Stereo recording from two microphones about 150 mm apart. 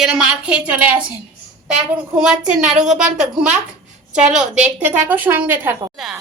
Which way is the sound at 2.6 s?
5° right (ahead or behind).